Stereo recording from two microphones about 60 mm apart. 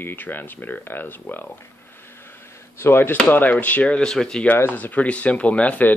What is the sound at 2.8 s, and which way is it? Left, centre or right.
Speech, left.